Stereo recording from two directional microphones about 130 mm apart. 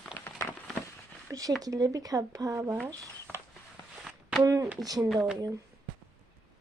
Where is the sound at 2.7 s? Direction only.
5° left (ahead or behind).